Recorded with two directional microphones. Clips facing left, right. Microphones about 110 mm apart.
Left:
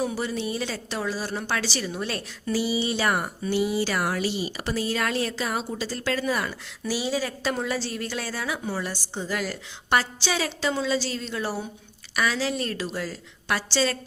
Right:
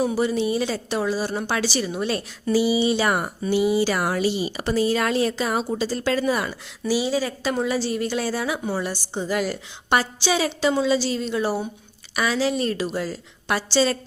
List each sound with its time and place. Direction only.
0.0 s a woman's voice: 20° right (ahead or behind)
6.8 s a woman's voice: 5° right (ahead or behind)